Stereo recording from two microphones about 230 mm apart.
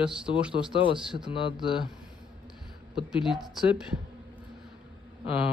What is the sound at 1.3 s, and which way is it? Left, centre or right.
Speech, left.